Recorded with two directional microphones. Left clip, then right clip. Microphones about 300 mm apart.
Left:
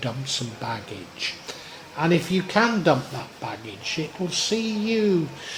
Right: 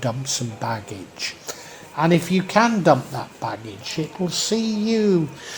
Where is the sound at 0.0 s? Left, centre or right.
Centre.